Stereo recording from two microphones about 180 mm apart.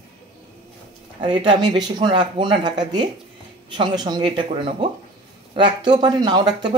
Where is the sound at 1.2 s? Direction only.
25° right (ahead or behind).